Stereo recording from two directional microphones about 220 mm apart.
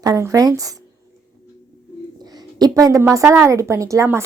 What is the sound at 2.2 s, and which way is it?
A woman's voice, 20° right (ahead or behind).